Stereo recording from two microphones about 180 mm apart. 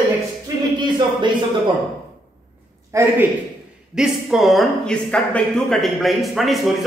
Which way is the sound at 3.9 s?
5° right (ahead or behind).